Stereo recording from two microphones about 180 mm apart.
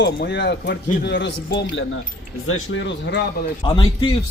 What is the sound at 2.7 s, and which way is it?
Speech, 80° left.